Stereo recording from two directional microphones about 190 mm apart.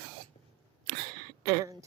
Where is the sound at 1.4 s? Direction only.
20° right (ahead or behind).